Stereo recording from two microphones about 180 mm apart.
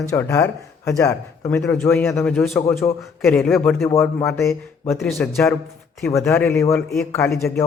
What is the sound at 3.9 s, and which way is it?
A man's voice, 15° left (ahead or behind).